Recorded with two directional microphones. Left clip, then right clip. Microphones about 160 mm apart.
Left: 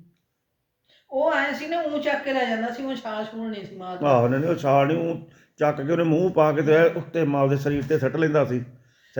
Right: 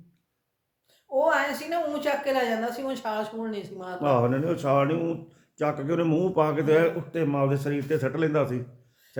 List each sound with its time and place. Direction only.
1.1 s a woman's voice: 40° right (ahead or behind)
4.0 s speech: 5° right (ahead or behind)